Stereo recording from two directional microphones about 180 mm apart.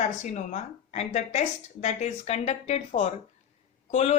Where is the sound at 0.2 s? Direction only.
40° left (ahead or behind).